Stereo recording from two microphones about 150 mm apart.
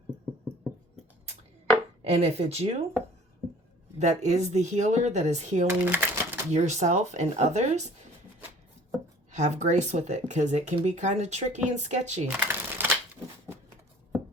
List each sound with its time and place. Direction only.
2.0 s speech: 50° right (ahead or behind)
3.9 s speech: 50° right (ahead or behind)
5.6 s a sound: 15° right (ahead or behind)
6.5 s speech: 50° right (ahead or behind)
9.3 s speech: 50° right (ahead or behind)
12.4 s shuffling cards: 15° right (ahead or behind)